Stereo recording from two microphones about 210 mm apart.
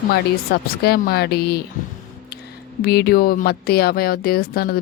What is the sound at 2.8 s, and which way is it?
Speech, 50° left (ahead or behind).